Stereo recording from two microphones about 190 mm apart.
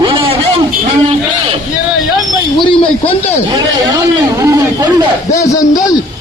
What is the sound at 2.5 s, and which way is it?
Speech, 25° left (ahead or behind).